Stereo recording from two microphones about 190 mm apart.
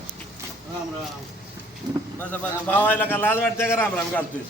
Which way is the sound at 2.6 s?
10° left (ahead or behind).